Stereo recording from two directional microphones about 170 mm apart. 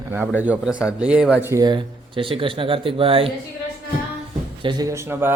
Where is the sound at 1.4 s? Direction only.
20° right (ahead or behind).